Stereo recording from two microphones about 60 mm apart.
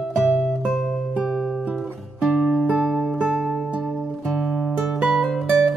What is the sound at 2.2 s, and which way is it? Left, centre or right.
Music, centre.